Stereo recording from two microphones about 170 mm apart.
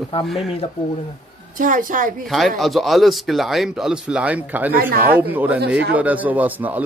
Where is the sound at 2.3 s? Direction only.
Centre (ahead or behind).